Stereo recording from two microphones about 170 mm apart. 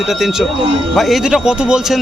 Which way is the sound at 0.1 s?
Centre (ahead or behind).